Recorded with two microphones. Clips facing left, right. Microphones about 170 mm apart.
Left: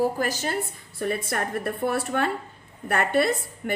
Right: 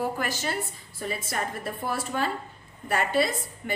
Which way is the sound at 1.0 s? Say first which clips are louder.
Left 4 dB; 60° left (ahead or behind).